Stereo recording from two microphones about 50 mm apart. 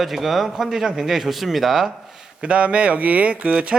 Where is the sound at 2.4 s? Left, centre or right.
Right.